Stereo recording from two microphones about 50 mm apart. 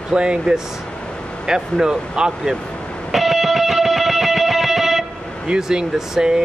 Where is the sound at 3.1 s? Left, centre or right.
Centre.